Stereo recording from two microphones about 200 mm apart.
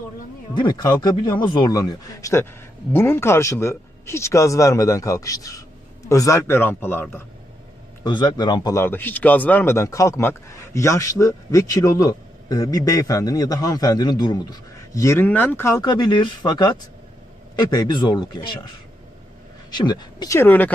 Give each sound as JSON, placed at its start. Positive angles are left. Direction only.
{"t": 0.5, "sound": "a man's voice", "side_deg": 20}
{"t": 8.0, "sound": "a man's voice", "side_deg": 20}
{"t": 19.7, "sound": "a man's voice", "side_deg": 20}